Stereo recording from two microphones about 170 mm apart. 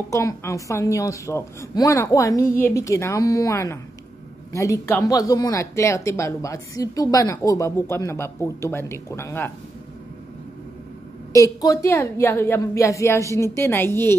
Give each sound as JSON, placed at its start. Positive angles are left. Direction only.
{"t": 0.1, "sound": "speech", "side_deg": 15}
{"t": 11.3, "sound": "speech", "side_deg": 20}